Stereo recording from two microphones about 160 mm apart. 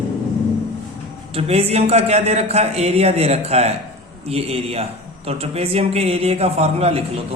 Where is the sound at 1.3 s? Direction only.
40° right (ahead or behind).